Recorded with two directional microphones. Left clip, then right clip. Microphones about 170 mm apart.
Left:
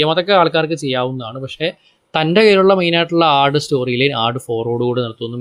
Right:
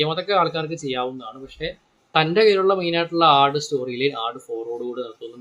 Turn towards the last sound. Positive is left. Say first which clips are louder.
# left 10 dB
turn(degrees=45)  # may be behind; listen again after turning